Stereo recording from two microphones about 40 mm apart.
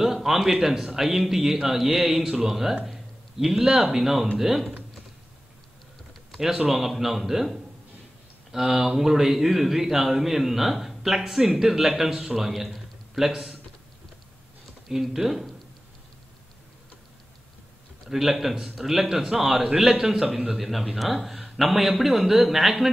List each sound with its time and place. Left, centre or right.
0.0 s a man's voice: centre
6.3 s a man's voice: centre
14.9 s a man's voice: centre
18.0 s a man's voice: centre